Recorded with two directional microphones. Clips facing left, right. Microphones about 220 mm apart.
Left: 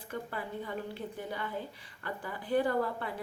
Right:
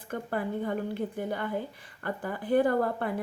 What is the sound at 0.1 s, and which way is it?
A woman's voice, 50° right (ahead or behind).